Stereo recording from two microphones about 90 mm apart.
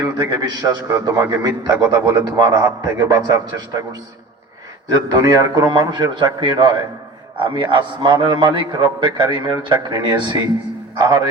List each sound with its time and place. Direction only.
0.3 s a man's voice: 50° right (ahead or behind)
4.9 s a man's voice: 40° right (ahead or behind)
5.9 s a man's voice: 55° right (ahead or behind)